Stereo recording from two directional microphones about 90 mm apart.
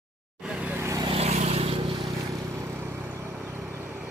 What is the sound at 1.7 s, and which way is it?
Vehicle, 75° right (ahead or behind).